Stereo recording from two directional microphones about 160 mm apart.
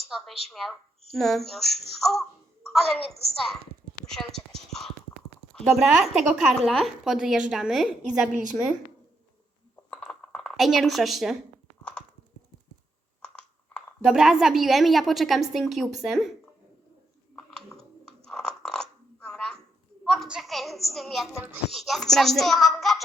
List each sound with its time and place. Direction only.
0.5 s a woman's voice: centre (ahead or behind)
8.3 s a woman's voice: 50° right (ahead or behind)
9.9 s a sound: 5° left (ahead or behind)
13.2 s a sound: 5° left (ahead or behind)
14.0 s a woman's voice: 5° right (ahead or behind)
18.3 s crunch: 5° left (ahead or behind)
20.1 s a woman's voice: 5° right (ahead or behind)